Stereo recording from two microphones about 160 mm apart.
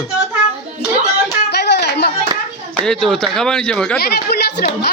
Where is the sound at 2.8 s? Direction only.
5° left (ahead or behind).